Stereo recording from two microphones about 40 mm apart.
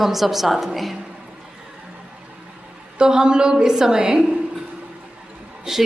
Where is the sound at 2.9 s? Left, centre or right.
Centre.